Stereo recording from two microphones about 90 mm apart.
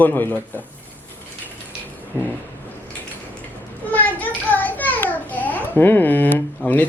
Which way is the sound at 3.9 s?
20° left (ahead or behind).